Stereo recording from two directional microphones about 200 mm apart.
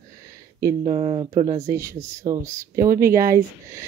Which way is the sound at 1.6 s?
15° right (ahead or behind).